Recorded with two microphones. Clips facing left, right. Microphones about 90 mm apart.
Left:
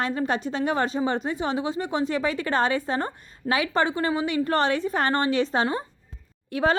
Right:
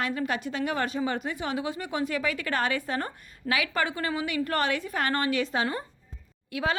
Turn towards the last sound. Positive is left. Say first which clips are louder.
# left 6 dB
turn(degrees=35)  # may be behind; listen again after turning